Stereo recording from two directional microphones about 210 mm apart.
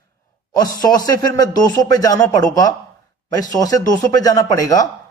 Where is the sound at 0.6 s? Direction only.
20° left (ahead or behind).